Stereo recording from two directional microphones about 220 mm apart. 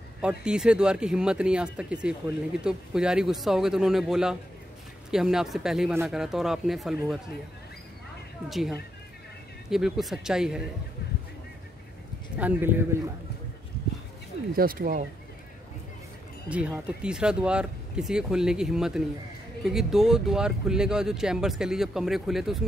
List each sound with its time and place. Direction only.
0.2 s speech: 5° right (ahead or behind)
8.5 s speech: centre (ahead or behind)
12.4 s speech: 10° right (ahead or behind)
14.5 s speech: 40° right (ahead or behind)
16.4 s speech: 5° right (ahead or behind)